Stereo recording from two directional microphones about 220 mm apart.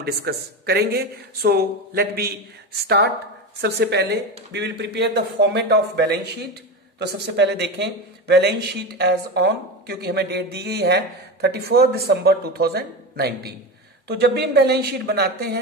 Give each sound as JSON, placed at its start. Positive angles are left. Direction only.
{"t": 0.0, "sound": "speech", "side_deg": -45}
{"t": 3.6, "sound": "speech", "side_deg": -50}